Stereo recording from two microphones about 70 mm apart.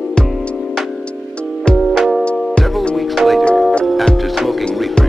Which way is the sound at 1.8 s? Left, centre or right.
Centre.